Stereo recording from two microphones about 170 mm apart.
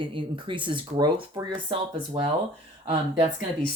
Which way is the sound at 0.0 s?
30° right (ahead or behind).